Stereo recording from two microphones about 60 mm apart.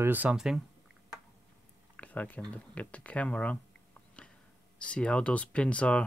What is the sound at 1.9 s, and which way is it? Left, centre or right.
Speech, left.